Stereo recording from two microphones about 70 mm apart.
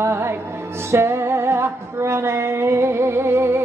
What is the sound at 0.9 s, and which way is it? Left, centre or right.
Music, right.